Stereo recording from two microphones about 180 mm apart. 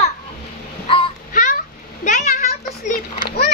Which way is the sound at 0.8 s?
30° left (ahead or behind).